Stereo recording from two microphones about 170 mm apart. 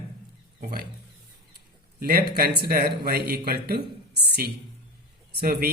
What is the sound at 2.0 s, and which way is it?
A man's voice, 65° right (ahead or behind).